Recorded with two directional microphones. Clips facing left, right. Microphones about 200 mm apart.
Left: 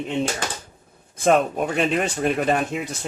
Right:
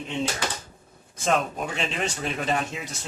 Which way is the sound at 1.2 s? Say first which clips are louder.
Left 7 dB; 55° left (ahead or behind).